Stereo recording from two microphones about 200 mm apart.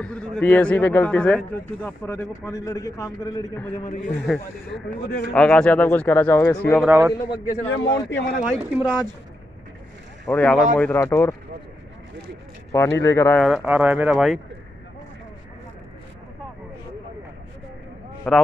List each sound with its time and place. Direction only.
0.0 s a man's voice: 5° left (ahead or behind)
3.8 s a man's voice: 40° left (ahead or behind)
4.1 s speech: centre (ahead or behind)
5.0 s a man's voice: 50° left (ahead or behind)
5.3 s a man's voice: 5° left (ahead or behind)
6.9 s speech: 10° right (ahead or behind)
7.8 s speech: 20° left (ahead or behind)
8.5 s speech: 10° right (ahead or behind)
10.2 s a man's voice: 10° left (ahead or behind)
12.7 s a man's voice: 15° left (ahead or behind)
13.5 s speech: 5° right (ahead or behind)
18.3 s speech: 5° left (ahead or behind)